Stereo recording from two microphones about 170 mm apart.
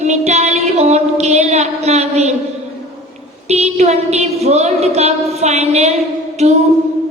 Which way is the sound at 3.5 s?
40° right (ahead or behind).